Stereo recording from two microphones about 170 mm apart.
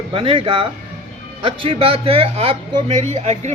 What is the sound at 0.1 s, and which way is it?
Speech, 30° right (ahead or behind).